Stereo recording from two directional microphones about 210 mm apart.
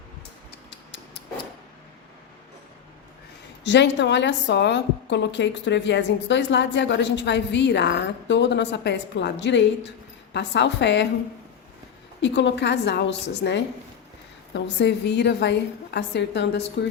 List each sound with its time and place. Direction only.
0.7 s a sound: 55° left (ahead or behind)
3.6 s a woman's voice: 55° left (ahead or behind)
12.2 s a woman's voice: 60° left (ahead or behind)